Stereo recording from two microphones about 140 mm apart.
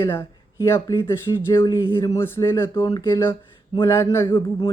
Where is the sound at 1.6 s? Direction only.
35° left (ahead or behind).